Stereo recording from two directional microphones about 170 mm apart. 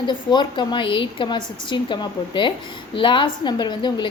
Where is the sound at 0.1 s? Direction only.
25° left (ahead or behind).